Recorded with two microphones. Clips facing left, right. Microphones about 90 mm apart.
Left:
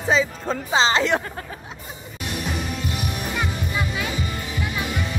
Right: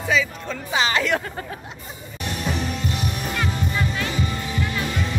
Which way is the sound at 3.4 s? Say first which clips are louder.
Right 2 dB; 10° left (ahead or behind).